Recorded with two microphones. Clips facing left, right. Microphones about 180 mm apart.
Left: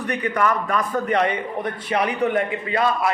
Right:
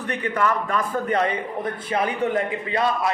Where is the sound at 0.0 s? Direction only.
30° right (ahead or behind).